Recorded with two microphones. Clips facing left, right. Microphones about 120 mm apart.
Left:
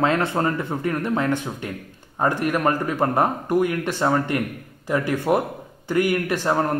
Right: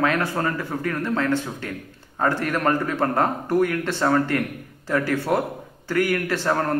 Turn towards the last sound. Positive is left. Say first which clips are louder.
# left 1 dB
turn(degrees=15)  # may be behind; listen again after turning